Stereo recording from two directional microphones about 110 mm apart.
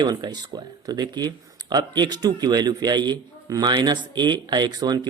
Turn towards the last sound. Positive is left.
turn(degrees=-35)  # may be behind; listen again after turning